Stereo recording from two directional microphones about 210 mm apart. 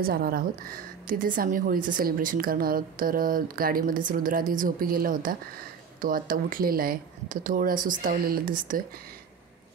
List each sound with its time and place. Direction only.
0.0 s a woman's voice: 45° right (ahead or behind)